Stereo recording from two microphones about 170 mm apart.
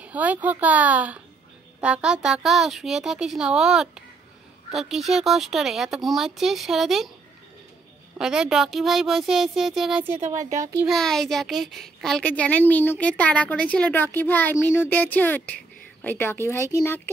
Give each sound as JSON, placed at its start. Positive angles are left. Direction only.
{"t": 0.0, "sound": "a woman's voice", "side_deg": -10}
{"t": 8.2, "sound": "speech", "side_deg": -5}
{"t": 10.2, "sound": "a woman's voice", "side_deg": -45}
{"t": 10.9, "sound": "a woman's voice", "side_deg": 0}